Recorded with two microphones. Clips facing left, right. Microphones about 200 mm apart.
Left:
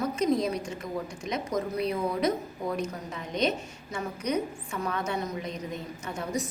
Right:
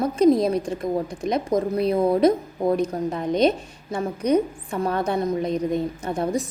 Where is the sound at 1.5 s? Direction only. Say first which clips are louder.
Right 7 dB; 30° right (ahead or behind).